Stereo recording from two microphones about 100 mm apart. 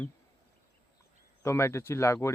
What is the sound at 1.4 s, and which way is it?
Speech, 30° left (ahead or behind).